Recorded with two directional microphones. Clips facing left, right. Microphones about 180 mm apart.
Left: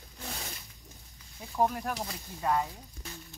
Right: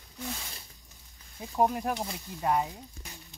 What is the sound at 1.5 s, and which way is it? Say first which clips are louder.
Speech: right 2 dB; 20° right (ahead or behind).